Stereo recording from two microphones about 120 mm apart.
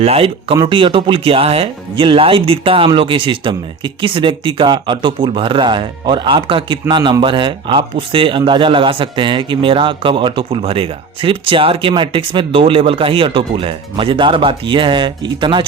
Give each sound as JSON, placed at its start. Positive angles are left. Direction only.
{"t": 0.0, "sound": "speech", "side_deg": -55}
{"t": 0.6, "sound": "speech", "side_deg": -40}